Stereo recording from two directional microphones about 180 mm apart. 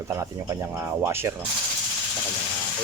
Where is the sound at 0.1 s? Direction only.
15° right (ahead or behind).